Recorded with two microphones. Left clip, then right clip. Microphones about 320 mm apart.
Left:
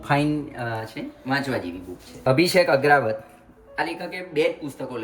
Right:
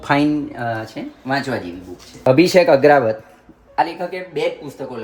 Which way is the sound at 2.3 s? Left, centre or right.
Right.